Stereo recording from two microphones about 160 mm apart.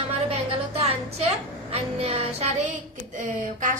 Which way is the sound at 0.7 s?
40° right (ahead or behind).